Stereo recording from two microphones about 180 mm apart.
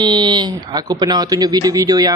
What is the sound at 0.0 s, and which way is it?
Speech, 25° right (ahead or behind).